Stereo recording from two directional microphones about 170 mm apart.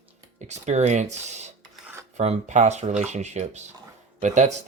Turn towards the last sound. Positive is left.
turn(degrees=-45)  # may be behind; listen again after turning